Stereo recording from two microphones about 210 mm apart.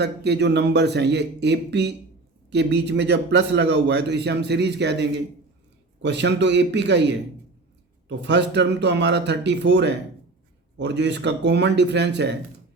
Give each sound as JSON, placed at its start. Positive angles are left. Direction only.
{"t": 0.0, "sound": "a man's voice", "side_deg": -55}